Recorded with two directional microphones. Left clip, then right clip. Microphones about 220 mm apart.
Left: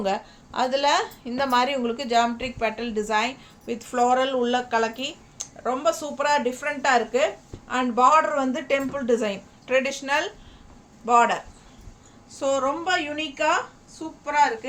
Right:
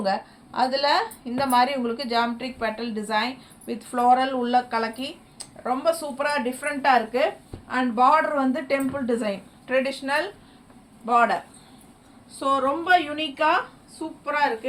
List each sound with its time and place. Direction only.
0.0 s a woman's voice: 25° left (ahead or behind)
12.4 s a woman's voice: 15° left (ahead or behind)